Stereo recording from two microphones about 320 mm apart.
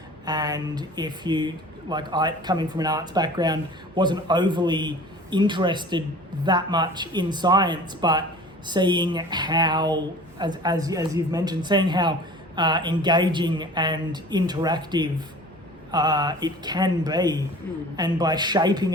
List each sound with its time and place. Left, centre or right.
0.3 s speech: centre